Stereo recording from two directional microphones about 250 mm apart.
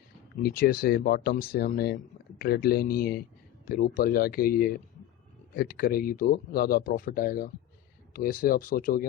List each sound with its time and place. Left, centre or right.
0.4 s a man's voice: left